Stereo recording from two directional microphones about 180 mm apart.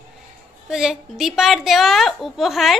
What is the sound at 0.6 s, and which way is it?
A woman's voice, 5° right (ahead or behind).